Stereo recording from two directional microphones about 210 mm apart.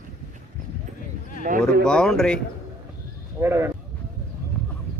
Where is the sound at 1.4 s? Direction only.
40° right (ahead or behind).